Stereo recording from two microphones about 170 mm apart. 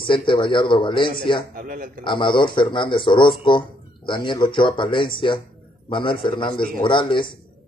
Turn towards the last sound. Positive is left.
turn(degrees=30)  # may be behind; listen again after turning